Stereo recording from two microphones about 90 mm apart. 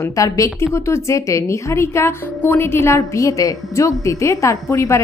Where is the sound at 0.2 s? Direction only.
35° left (ahead or behind).